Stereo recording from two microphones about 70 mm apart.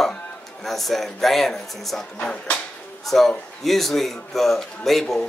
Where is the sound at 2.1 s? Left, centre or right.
Left.